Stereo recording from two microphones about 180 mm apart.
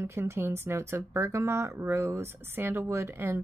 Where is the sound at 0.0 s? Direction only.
15° right (ahead or behind).